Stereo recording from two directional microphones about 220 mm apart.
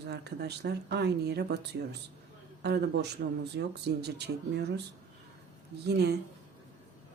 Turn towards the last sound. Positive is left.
turn(degrees=-45)  # may be behind; listen again after turning